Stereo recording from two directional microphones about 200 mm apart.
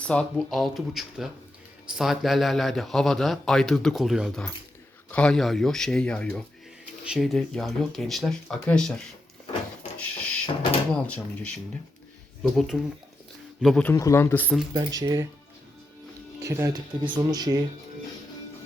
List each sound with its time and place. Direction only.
0.1 s a man's voice: 5° left (ahead or behind)
10.0 s a sound: 5° left (ahead or behind)
10.4 s speech: 25° left (ahead or behind)
10.9 s a man's voice: 5° left (ahead or behind)
13.9 s speech: 15° left (ahead or behind)
14.7 s speech: 20° right (ahead or behind)
16.4 s speech: 15° right (ahead or behind)